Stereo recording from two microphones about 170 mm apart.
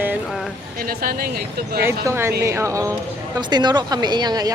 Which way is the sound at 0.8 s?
60° right (ahead or behind).